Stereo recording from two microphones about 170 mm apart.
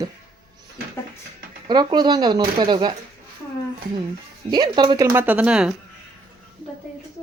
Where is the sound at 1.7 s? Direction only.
25° right (ahead or behind).